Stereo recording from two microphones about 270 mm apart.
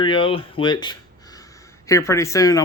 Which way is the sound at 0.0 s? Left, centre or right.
Centre.